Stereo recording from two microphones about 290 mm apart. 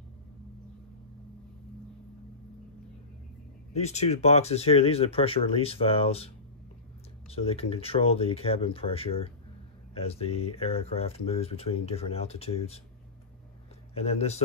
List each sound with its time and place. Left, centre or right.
3.7 s speech: left
13.9 s speech: left